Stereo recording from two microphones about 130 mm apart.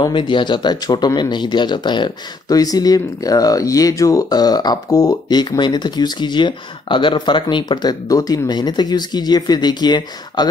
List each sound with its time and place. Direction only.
0.0 s speech: 40° left (ahead or behind)